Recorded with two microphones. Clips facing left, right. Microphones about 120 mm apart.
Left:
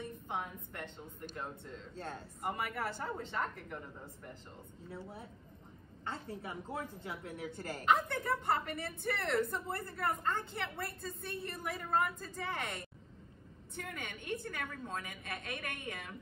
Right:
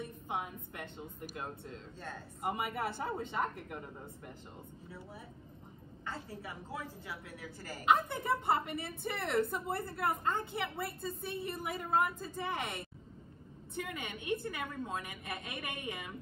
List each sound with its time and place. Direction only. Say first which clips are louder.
0.0 s a woman's voice: right 1 dB; 5° right (ahead or behind)
6.0 s a woman's voice: left 1 dB; 25° left (ahead or behind)
7.8 s a woman's voice: right 1 dB; 5° right (ahead or behind)
13.8 s a woman's voice: right 3 dB; 10° right (ahead or behind)